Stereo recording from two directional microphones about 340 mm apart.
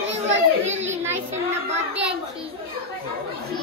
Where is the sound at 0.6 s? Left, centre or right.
Right.